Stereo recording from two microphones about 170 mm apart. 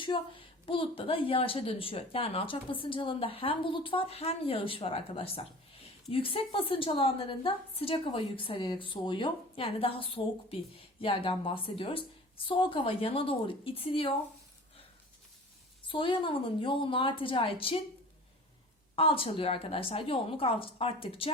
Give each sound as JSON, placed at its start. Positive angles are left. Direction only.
{"t": 0.0, "sound": "a woman's voice", "side_deg": 30}
{"t": 15.9, "sound": "a woman's voice", "side_deg": 30}
{"t": 18.9, "sound": "a woman's voice", "side_deg": 30}